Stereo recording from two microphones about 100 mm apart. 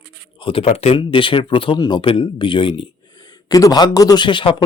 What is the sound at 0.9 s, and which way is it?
Speech, 55° left (ahead or behind).